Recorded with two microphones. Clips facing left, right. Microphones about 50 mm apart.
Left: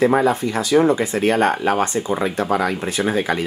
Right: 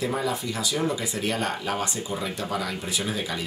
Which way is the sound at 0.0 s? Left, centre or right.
Left.